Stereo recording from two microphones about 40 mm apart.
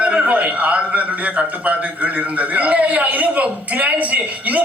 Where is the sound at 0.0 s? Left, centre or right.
Right.